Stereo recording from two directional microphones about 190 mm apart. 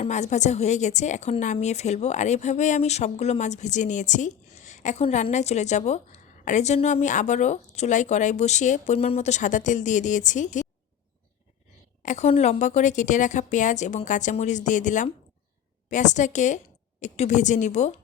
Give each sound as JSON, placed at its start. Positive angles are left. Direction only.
{"t": 0.0, "sound": "speech", "side_deg": 40}
{"t": 12.0, "sound": "speech", "side_deg": 35}